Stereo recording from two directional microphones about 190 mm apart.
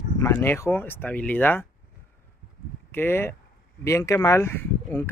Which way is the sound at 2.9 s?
10° left (ahead or behind).